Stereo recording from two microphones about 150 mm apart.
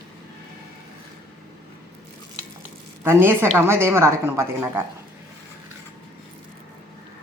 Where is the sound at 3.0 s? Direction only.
15° right (ahead or behind).